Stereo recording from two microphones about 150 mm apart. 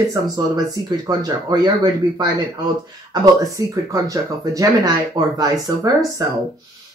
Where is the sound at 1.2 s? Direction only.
25° right (ahead or behind).